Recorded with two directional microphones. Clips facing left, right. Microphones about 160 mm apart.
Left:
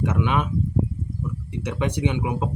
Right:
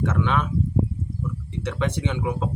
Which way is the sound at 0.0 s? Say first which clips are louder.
Left 1 dB; 15° left (ahead or behind).